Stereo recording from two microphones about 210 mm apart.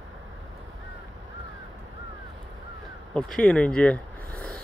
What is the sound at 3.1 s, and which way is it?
Speech, 5° left (ahead or behind).